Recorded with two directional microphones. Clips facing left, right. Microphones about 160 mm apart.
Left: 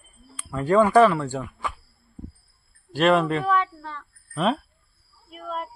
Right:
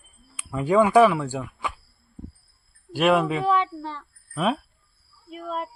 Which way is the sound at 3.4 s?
25° right (ahead or behind).